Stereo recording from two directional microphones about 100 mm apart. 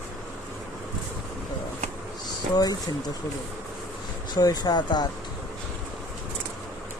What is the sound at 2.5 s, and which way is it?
Speech, 40° left (ahead or behind).